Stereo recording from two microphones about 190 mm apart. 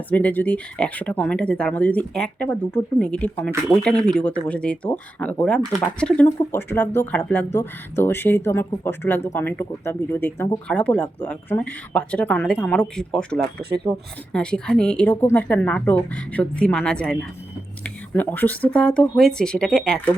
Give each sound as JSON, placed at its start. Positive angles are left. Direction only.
{"t": 0.1, "sound": "speech", "side_deg": 10}
{"t": 13.4, "sound": "speech", "side_deg": -55}
{"t": 14.3, "sound": "speech", "side_deg": 5}